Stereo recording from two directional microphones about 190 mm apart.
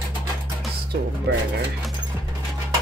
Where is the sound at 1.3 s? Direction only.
60° right (ahead or behind).